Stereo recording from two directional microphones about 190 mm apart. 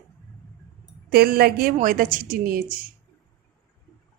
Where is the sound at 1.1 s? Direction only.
55° right (ahead or behind).